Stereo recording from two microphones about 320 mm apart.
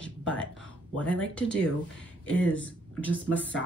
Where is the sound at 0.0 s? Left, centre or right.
Centre.